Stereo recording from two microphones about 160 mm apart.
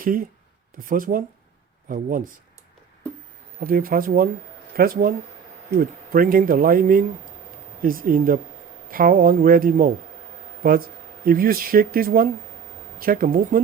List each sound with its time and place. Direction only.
0.0 s speech: 60° right (ahead or behind)
3.6 s speech: 65° right (ahead or behind)